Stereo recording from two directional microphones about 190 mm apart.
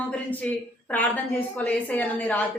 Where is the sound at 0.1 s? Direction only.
10° left (ahead or behind).